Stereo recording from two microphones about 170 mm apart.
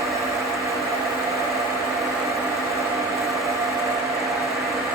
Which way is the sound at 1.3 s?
20° right (ahead or behind).